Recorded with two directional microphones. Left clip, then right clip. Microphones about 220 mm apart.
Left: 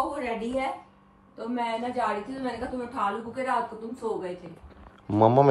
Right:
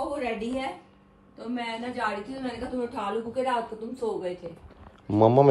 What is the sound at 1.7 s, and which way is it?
Speech, 30° left (ahead or behind).